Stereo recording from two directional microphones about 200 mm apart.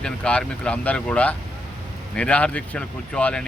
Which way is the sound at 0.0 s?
5° left (ahead or behind).